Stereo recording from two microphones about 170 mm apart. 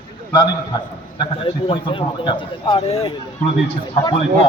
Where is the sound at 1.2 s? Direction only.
30° left (ahead or behind).